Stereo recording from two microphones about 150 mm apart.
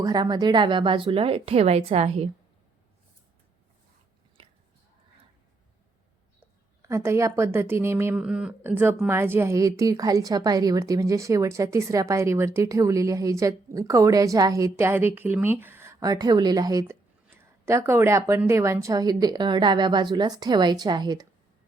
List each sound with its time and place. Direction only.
0.0 s a woman's voice: 25° right (ahead or behind); by 2.3 s 40° right (ahead or behind)
4.4 s biting: 35° right (ahead or behind)
6.8 s a woman's voice: 20° right (ahead or behind)
8.1 s a woman's voice: 5° right (ahead or behind); by 21.2 s 30° right (ahead or behind)